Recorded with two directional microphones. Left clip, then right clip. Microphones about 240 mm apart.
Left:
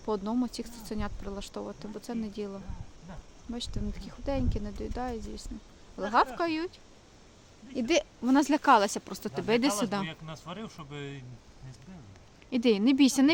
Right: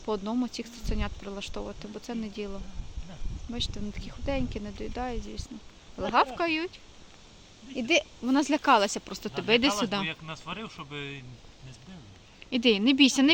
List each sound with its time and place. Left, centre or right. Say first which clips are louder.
0.0 s speech: right 1 dB; centre
7.8 s speech: right 2 dB; centre
10.1 s speech: right 5 dB; left
12.5 s speech: right 2 dB; centre